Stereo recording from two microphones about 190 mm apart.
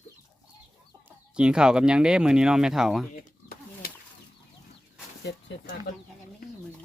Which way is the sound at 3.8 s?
55° left (ahead or behind).